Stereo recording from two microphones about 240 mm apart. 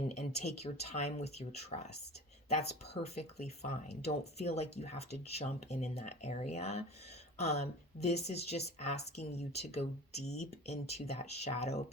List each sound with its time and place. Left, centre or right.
0.2 s speech: left